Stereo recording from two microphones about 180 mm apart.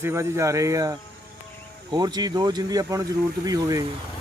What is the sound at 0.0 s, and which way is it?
Speech, 15° right (ahead or behind).